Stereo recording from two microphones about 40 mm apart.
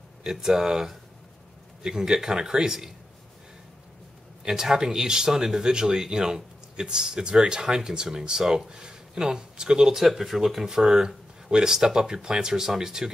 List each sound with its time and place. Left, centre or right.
0.2 s speech: centre
4.5 s speech: centre